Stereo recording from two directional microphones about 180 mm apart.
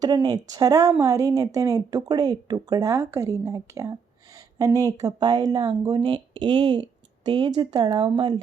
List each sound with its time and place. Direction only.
0.0 s speech: 25° right (ahead or behind)